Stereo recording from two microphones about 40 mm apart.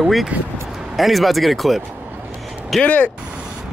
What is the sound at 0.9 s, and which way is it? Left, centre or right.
Speech, centre.